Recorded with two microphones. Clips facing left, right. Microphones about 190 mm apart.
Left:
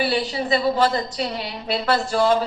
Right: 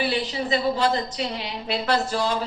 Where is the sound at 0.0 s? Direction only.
50° left (ahead or behind).